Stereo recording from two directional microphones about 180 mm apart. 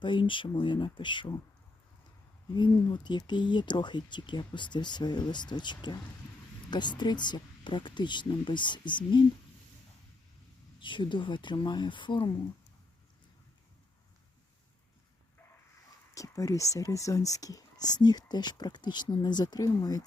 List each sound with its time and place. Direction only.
0.0 s speech: 25° left (ahead or behind)
2.6 s speech: 25° left (ahead or behind)
10.8 s speech: 25° left (ahead or behind)
16.1 s speech: 20° left (ahead or behind)